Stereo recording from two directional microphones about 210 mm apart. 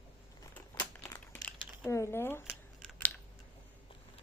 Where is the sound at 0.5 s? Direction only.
10° left (ahead or behind).